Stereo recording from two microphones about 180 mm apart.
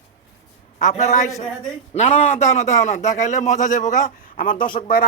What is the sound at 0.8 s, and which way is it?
A man's voice, 40° left (ahead or behind).